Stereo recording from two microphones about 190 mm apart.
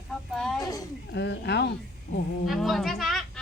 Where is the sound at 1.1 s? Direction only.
65° left (ahead or behind).